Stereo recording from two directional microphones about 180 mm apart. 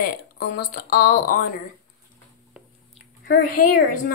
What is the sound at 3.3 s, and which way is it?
Speech, 50° left (ahead or behind).